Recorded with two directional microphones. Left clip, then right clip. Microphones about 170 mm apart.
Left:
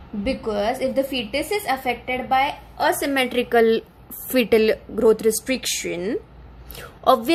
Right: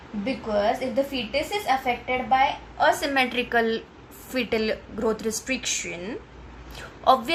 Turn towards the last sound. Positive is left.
turn(degrees=60)  # may be behind; listen again after turning